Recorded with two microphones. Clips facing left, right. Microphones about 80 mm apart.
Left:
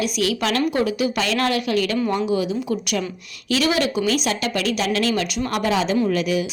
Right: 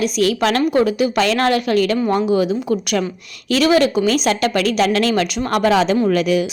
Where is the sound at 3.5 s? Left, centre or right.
Right.